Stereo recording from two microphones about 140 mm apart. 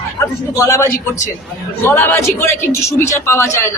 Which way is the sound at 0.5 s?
20° left (ahead or behind).